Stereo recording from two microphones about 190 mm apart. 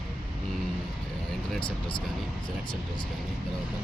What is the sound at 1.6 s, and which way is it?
Speech, 25° left (ahead or behind).